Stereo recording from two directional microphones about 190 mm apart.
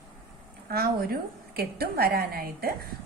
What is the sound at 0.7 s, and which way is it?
A woman's voice, 55° right (ahead or behind).